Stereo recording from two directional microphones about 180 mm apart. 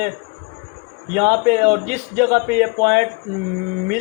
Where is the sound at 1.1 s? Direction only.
45° right (ahead or behind).